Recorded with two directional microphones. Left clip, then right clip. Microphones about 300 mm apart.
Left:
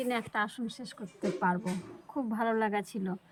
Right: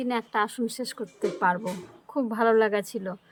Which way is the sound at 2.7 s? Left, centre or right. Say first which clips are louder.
Right 6 dB; centre.